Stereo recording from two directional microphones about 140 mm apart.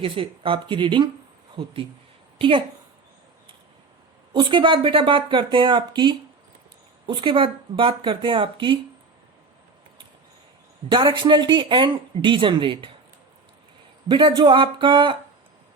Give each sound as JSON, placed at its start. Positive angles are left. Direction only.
{"t": 0.0, "sound": "speech", "side_deg": -40}
{"t": 2.4, "sound": "speech", "side_deg": -35}
{"t": 4.4, "sound": "speech", "side_deg": -35}
{"t": 10.8, "sound": "speech", "side_deg": -35}
{"t": 14.1, "sound": "speech", "side_deg": -35}